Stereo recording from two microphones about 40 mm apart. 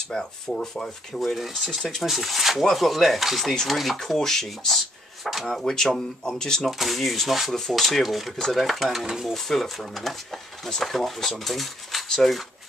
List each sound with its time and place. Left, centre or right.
0.1 s speech: centre
0.8 s speech: centre
1.3 s speech: centre
2.0 s speech: centre
6.7 s speech: centre
8.4 s speech: centre